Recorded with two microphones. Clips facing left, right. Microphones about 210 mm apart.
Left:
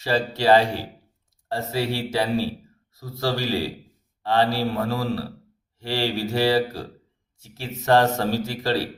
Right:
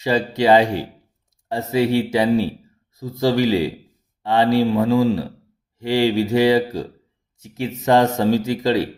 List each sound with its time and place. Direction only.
0.0 s speech: 20° right (ahead or behind)